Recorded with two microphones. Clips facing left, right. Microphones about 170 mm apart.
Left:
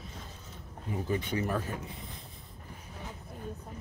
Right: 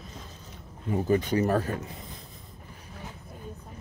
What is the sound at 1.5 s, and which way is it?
Speech, 60° right (ahead or behind).